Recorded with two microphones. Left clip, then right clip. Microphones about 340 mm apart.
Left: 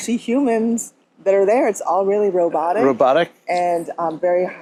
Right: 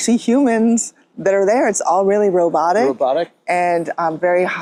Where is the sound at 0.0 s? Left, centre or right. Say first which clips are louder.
Right 4 dB; right.